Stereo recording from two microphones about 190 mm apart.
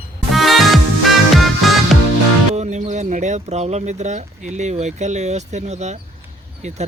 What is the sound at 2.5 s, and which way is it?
Speech, 40° right (ahead or behind).